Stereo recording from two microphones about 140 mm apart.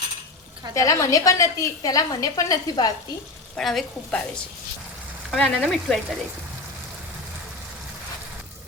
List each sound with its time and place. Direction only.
0.7 s a woman's voice: 20° left (ahead or behind)
3.6 s speech: centre (ahead or behind)
5.3 s speech: centre (ahead or behind)